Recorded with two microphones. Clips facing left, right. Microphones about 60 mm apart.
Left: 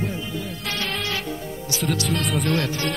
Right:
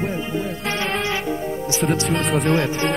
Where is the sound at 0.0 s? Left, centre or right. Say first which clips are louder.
Right 5 dB; right.